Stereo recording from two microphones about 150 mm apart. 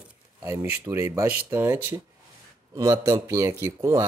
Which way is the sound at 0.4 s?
15° right (ahead or behind).